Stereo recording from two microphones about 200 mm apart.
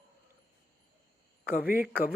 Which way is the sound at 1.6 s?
10° right (ahead or behind).